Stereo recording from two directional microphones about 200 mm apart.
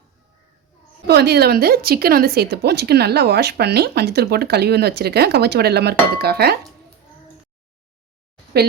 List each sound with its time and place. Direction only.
1.0 s a woman's voice: 55° right (ahead or behind)